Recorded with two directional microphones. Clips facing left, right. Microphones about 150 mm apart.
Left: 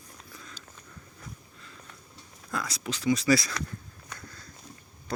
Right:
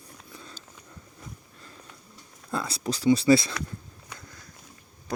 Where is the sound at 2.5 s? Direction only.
30° right (ahead or behind).